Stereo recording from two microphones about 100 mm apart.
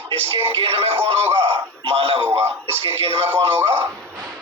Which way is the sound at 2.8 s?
65° right (ahead or behind).